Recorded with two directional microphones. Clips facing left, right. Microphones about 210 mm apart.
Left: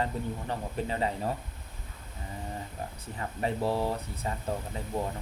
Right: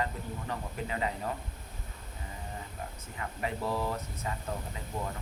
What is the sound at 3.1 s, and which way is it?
Speech, 30° left (ahead or behind).